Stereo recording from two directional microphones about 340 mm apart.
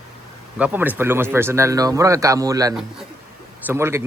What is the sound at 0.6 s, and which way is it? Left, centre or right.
A man's voice, centre.